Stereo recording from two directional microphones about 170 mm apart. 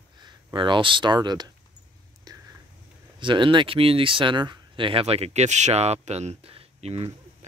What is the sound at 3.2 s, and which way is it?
Speech, 30° right (ahead or behind).